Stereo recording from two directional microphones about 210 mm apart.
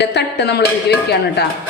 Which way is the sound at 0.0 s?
55° left (ahead or behind).